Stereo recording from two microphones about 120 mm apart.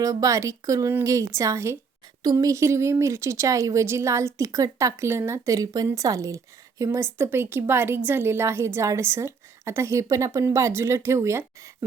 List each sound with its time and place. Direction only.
0.0 s speech: 30° right (ahead or behind)